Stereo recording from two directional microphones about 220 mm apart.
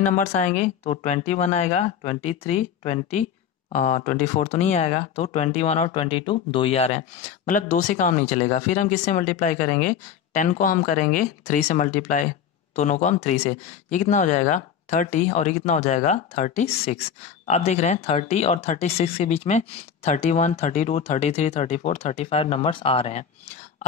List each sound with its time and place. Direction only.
0.1 s speech: 35° left (ahead or behind)